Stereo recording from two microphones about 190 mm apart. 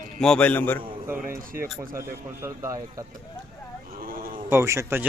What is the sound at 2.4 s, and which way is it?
Speech, 15° right (ahead or behind).